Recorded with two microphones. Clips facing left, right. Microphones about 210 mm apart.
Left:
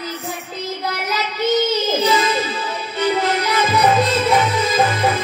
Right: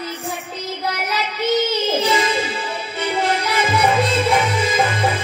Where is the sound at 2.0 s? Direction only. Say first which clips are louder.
Left 1 dB; 30° right (ahead or behind).